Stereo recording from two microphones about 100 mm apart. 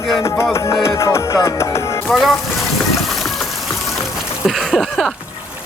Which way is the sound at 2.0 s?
Centre (ahead or behind).